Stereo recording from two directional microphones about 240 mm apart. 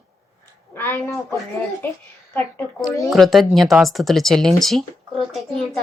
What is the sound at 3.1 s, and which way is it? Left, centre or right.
Speech, centre.